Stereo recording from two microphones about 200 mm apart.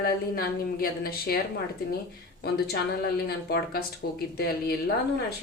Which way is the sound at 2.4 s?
50° left (ahead or behind).